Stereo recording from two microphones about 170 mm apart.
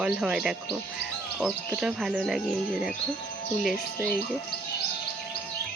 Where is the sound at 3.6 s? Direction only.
Centre (ahead or behind).